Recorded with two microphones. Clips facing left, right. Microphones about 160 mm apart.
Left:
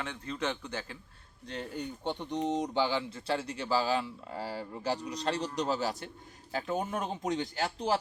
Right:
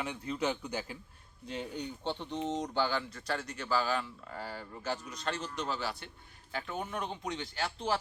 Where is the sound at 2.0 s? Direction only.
15° left (ahead or behind); by 8.0 s 40° left (ahead or behind).